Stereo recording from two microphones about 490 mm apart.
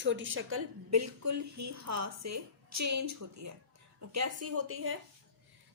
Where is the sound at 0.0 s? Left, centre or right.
Right.